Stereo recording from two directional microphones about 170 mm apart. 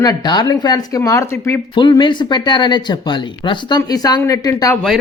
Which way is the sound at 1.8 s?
30° left (ahead or behind).